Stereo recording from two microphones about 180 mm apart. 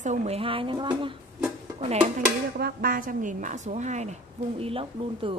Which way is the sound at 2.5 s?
55° right (ahead or behind).